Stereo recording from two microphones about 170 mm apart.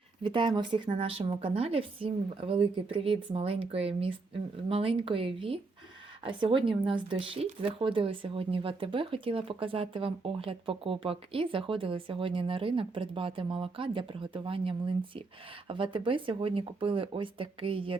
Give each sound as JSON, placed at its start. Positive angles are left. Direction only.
{"t": 0.2, "sound": "speech", "side_deg": -30}